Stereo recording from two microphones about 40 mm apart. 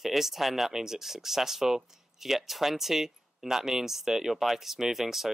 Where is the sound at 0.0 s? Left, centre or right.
Centre.